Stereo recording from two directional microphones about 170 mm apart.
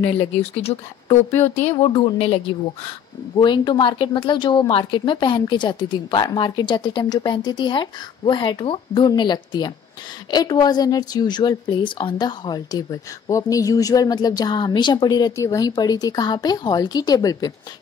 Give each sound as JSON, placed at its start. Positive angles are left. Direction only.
{"t": 0.2, "sound": "speech", "side_deg": 35}
{"t": 1.3, "sound": "speech", "side_deg": 15}
{"t": 1.7, "sound": "a woman's voice", "side_deg": 35}